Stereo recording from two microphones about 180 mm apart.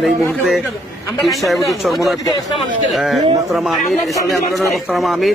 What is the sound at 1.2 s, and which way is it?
A man's voice, centre (ahead or behind).